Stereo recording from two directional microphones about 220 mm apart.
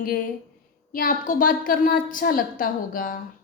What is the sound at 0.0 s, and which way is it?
A woman's voice, 40° left (ahead or behind).